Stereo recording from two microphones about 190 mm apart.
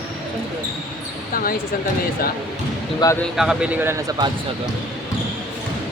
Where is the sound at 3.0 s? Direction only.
15° left (ahead or behind).